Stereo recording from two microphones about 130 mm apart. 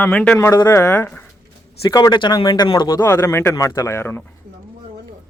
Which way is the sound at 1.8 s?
30° left (ahead or behind).